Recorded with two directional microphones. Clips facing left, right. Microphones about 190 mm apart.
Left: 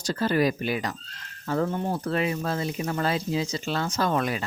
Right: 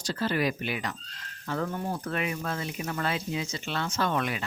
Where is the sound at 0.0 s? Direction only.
45° left (ahead or behind).